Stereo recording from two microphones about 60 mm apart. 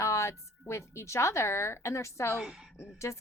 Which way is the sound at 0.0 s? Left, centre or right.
Left.